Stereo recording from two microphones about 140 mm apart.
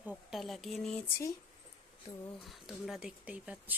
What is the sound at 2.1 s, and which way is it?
Speech, 50° left (ahead or behind).